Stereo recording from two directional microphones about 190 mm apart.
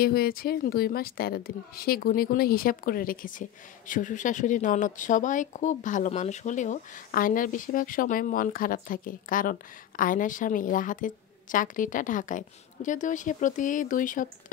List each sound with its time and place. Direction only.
0.0 s a woman's voice: 55° left (ahead or behind)